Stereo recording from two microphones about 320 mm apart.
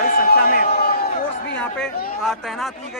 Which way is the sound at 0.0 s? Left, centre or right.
Left.